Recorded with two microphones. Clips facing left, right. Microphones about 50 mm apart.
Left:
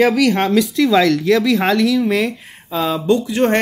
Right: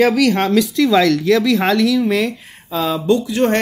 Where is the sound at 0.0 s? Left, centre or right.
Centre.